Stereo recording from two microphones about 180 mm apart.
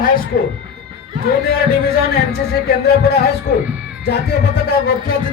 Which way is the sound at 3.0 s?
65° left (ahead or behind).